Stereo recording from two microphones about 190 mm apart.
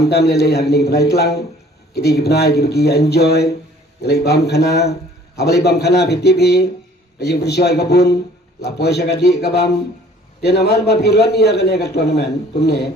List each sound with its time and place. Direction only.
0.1 s a man's voice: 60° left (ahead or behind)